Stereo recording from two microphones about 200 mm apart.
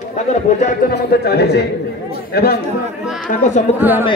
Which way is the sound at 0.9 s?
50° left (ahead or behind).